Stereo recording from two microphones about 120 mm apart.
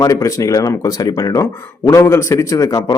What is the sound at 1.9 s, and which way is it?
Speech, 20° left (ahead or behind).